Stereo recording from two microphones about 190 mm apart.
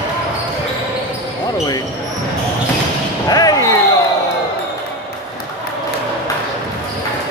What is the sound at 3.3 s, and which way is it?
Basketball bounce, 20° left (ahead or behind).